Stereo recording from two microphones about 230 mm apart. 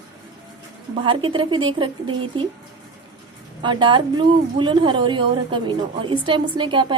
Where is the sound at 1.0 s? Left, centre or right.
Right.